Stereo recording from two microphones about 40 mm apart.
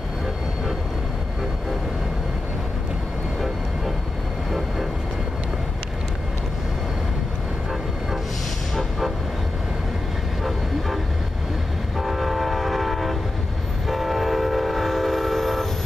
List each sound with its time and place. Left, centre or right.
4.5 s vehicle: centre
12.0 s train: centre